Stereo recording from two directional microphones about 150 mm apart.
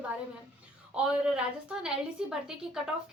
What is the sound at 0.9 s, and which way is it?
A woman's voice, 5° right (ahead or behind).